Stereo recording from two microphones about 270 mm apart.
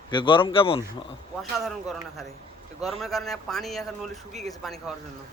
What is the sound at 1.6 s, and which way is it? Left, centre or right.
Speech, centre.